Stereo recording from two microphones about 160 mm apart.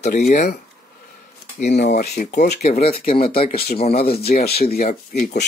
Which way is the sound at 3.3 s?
65° left (ahead or behind).